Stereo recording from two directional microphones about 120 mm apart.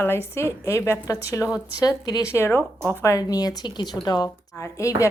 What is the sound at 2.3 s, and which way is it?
A woman's voice, 20° left (ahead or behind).